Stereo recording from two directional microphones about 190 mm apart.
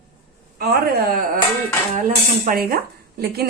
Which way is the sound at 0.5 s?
55° right (ahead or behind).